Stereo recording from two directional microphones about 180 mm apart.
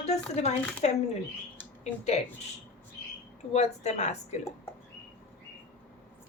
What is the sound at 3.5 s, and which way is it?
Speech, 40° left (ahead or behind).